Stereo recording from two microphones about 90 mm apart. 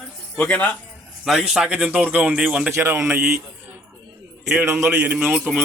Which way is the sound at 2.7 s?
30° right (ahead or behind).